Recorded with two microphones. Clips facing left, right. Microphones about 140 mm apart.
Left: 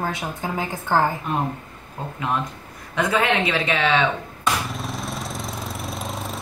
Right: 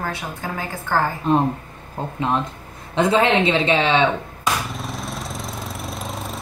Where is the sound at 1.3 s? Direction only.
25° right (ahead or behind).